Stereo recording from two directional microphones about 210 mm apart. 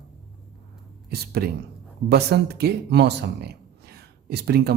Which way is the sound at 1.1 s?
50° right (ahead or behind).